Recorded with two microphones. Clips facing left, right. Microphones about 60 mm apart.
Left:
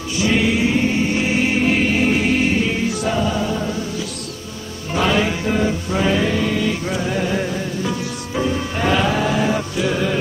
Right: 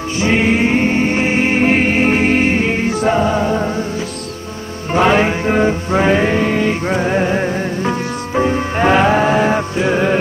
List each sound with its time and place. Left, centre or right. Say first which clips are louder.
0.2 s music: right 3 dB; right
4.9 s music: right 6 dB; right